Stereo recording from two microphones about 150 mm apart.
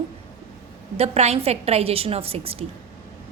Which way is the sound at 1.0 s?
45° right (ahead or behind).